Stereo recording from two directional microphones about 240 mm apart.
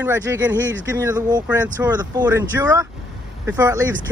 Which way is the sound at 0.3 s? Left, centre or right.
Centre.